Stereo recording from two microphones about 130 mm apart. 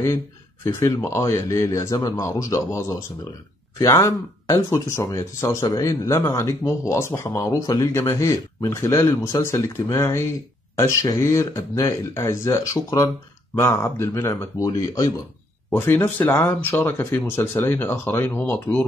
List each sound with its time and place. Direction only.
0.7 s speech: 25° left (ahead or behind)
15.7 s speech: 15° left (ahead or behind)